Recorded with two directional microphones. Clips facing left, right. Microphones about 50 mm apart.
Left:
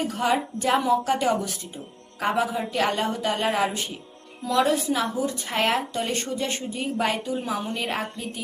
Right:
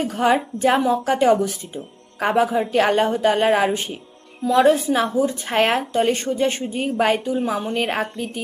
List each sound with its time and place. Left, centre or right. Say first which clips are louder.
0.2 s a woman's voice: right 7 dB; right